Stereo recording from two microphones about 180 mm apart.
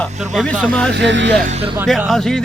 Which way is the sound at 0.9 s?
75° right (ahead or behind).